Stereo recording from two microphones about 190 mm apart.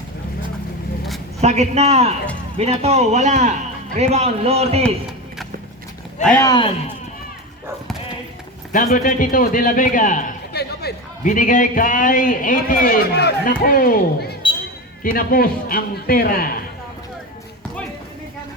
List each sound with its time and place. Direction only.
1.4 s a man's voice: 35° right (ahead or behind)
6.2 s speech: 15° left (ahead or behind)
8.7 s a man's voice: 45° left (ahead or behind)
10.5 s a sound: 60° left (ahead or behind)
11.2 s a man's voice: 45° left (ahead or behind)